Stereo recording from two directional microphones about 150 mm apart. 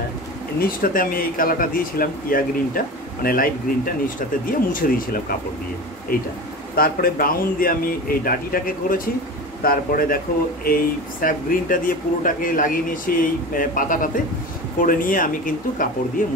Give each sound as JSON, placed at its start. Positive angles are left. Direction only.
{"t": 0.6, "sound": "speech", "side_deg": 70}
{"t": 6.7, "sound": "speech", "side_deg": 80}